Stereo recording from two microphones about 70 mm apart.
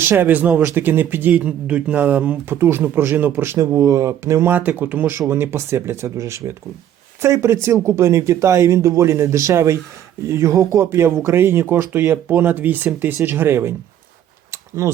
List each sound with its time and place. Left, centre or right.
0.0 s speech: right
2.6 s speech: right
3.6 s speech: right
14.8 s speech: right